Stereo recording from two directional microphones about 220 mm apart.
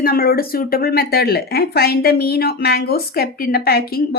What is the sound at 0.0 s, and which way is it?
Speech, 45° left (ahead or behind).